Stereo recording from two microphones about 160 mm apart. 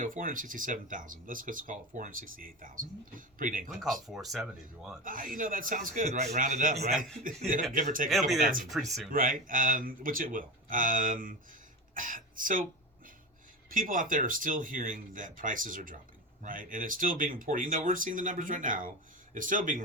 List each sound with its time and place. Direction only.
0.0 s speech: 60° right (ahead or behind)
4.0 s speech: centre (ahead or behind)
5.0 s speech: 60° right (ahead or behind)
13.7 s speech: 60° right (ahead or behind)